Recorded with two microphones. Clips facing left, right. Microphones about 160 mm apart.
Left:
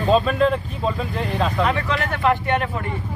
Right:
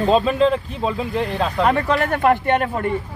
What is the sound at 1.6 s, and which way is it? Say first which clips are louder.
Speech: right 4 dB; 45° right (ahead or behind).